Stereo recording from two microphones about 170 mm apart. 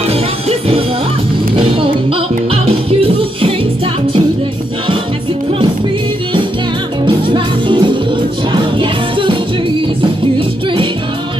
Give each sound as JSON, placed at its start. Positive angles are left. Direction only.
{"t": 0.1, "sound": "music", "side_deg": -35}
{"t": 7.1, "sound": "music", "side_deg": -30}